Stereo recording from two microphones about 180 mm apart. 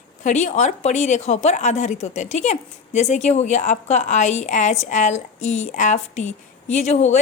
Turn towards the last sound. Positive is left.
turn(degrees=40)  # may be behind; listen again after turning